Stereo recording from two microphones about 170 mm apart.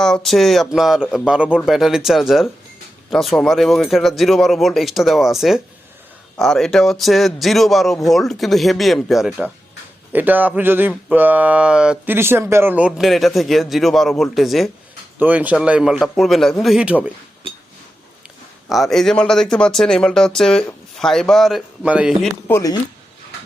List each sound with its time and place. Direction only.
0.0 s speech: 5° left (ahead or behind)
18.7 s speech: centre (ahead or behind)
22.4 s speech: 20° left (ahead or behind)